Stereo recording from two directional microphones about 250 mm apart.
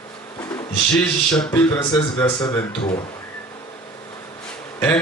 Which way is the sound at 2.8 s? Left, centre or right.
Centre.